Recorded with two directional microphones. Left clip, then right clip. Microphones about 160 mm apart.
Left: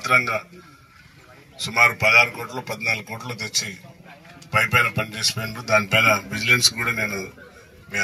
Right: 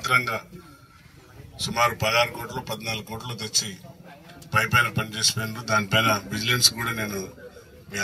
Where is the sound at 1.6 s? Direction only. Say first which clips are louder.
Left 6 dB; 30° left (ahead or behind).